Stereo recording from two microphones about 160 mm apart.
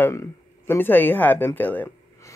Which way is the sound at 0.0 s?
15° left (ahead or behind).